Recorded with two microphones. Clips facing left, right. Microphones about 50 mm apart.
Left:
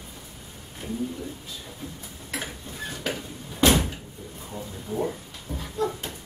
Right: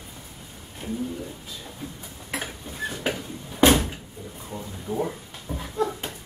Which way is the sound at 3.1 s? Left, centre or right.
Centre.